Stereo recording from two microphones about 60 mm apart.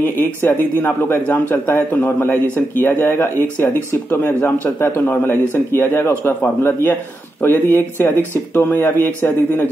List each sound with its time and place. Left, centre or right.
0.0 s speech: left